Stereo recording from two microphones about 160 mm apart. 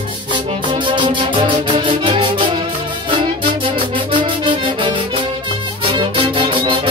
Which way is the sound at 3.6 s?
35° right (ahead or behind).